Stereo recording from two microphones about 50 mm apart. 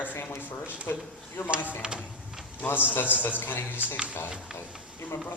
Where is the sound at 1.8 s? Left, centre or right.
Centre.